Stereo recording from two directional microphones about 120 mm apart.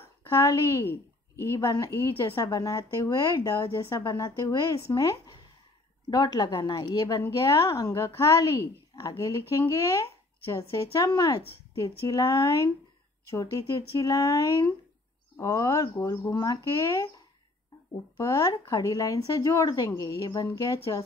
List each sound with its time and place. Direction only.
0.4 s a woman's voice: 30° left (ahead or behind)
18.1 s speech: 25° left (ahead or behind)